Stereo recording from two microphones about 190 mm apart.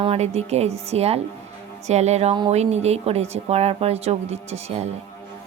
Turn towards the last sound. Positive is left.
turn(degrees=-35)  # may be behind; listen again after turning